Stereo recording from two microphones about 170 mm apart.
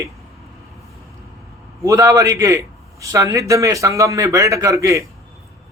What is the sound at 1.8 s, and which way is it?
A man's voice, 20° right (ahead or behind).